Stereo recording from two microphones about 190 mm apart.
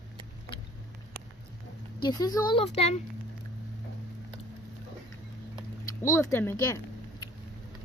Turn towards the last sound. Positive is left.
turn(degrees=15)  # may be behind; listen again after turning